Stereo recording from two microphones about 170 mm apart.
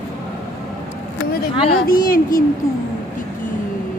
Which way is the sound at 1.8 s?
55° left (ahead or behind).